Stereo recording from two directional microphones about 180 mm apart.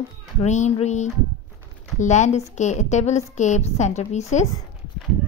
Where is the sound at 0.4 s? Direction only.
40° left (ahead or behind).